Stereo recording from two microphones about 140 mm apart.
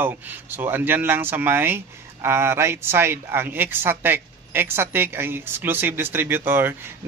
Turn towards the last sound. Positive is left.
turn(degrees=-15)  # may be behind; listen again after turning